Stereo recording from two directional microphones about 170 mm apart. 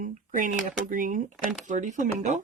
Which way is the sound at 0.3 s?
50° right (ahead or behind).